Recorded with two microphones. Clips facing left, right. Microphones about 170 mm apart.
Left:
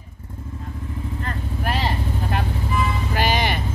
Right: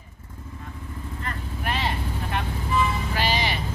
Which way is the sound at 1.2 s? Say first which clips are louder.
Left 3 dB; 35° left (ahead or behind).